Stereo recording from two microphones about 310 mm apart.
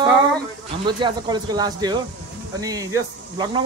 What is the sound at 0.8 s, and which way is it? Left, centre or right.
Speech, centre.